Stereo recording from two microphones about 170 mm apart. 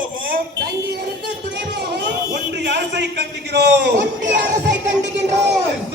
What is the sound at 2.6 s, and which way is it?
A man's voice, 80° right.